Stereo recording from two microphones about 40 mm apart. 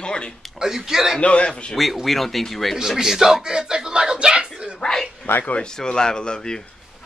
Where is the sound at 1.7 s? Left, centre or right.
Centre.